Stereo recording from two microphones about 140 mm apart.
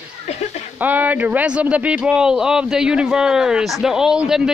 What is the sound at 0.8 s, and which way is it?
Speech, 10° right (ahead or behind).